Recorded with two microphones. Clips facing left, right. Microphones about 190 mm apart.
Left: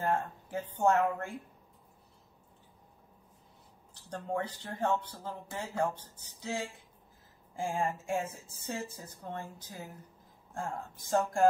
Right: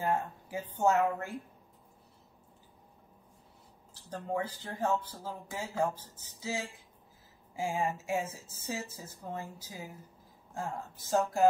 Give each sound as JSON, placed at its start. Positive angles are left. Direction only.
{"t": 0.0, "sound": "speech", "side_deg": -5}
{"t": 4.1, "sound": "speech", "side_deg": 0}